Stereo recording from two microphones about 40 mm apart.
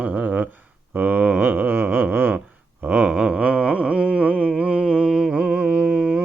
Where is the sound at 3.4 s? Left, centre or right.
Right.